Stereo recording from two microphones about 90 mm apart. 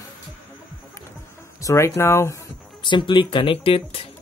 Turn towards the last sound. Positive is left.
turn(degrees=90)